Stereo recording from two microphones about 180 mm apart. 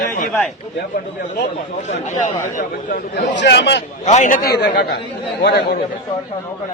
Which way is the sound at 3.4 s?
70° left (ahead or behind).